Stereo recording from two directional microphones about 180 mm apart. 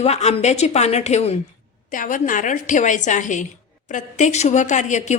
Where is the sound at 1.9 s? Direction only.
45° left (ahead or behind).